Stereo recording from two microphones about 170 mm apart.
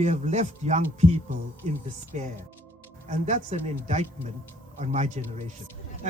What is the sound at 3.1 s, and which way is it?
Speech, 45° right (ahead or behind).